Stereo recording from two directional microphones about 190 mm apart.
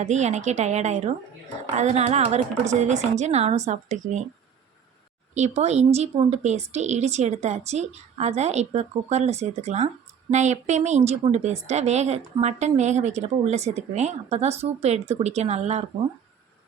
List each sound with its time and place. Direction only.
0.0 s speech: 40° right (ahead or behind)
5.3 s speech: 35° right (ahead or behind)